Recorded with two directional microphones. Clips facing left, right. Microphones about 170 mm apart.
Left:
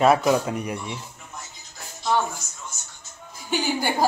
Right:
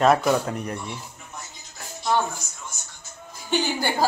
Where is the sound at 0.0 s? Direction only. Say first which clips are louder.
Left 1 dB; 5° left (ahead or behind).